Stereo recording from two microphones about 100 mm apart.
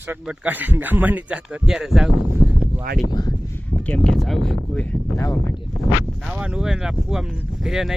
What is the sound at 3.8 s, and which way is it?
Speech, 15° left (ahead or behind).